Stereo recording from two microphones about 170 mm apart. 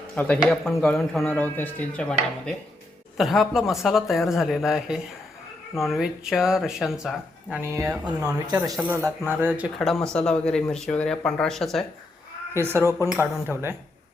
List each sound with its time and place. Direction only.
0.2 s a man's voice: 5° left (ahead or behind)
1.2 s a man's voice: 10° left (ahead or behind)
7.6 s speech: 15° right (ahead or behind)
8.7 s a man's voice: 5° right (ahead or behind)
9.0 s speech: 15° right (ahead or behind)
9.7 s a man's voice: centre (ahead or behind)
12.5 s speech: 15° right (ahead or behind)